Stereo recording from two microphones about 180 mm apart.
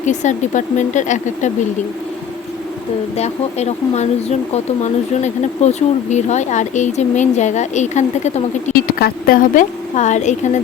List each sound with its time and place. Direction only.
0.0 s speech: 40° left (ahead or behind)
3.2 s speech: 35° left (ahead or behind)
9.0 s speech: 55° left (ahead or behind)